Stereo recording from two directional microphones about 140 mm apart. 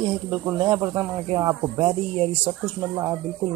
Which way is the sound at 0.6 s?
30° right (ahead or behind).